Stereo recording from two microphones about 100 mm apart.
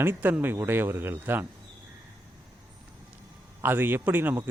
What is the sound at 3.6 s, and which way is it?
Speech, 20° right (ahead or behind).